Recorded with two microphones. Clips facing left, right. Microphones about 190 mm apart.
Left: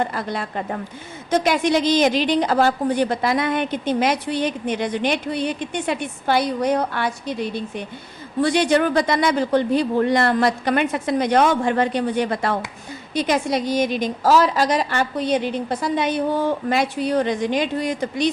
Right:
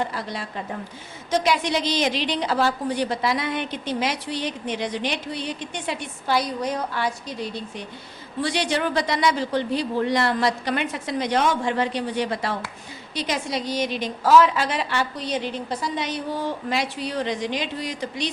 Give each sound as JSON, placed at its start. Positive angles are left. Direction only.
{"t": 0.0, "sound": "a woman's voice", "side_deg": 55}